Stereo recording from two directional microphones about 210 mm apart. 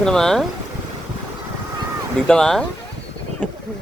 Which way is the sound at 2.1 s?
5° left (ahead or behind).